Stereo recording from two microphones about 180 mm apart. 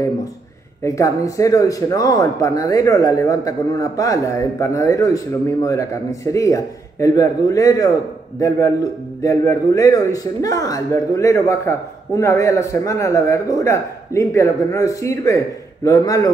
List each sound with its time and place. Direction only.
0.8 s a man's voice: 20° left (ahead or behind)